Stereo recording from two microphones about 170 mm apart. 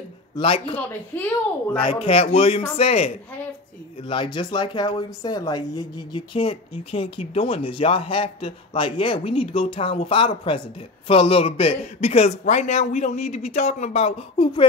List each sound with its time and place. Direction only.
0.4 s speech: 35° left (ahead or behind)
1.8 s speech: 30° left (ahead or behind)